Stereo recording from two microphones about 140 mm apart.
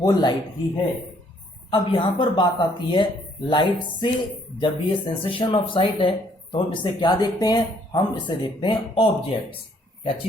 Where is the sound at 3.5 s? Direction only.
35° left (ahead or behind).